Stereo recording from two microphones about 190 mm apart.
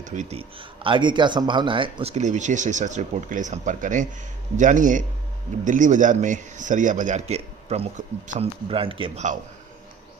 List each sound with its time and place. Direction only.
0.0 s speech: 40° right (ahead or behind)